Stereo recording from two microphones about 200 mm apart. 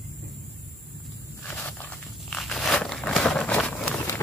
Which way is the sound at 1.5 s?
10° left (ahead or behind).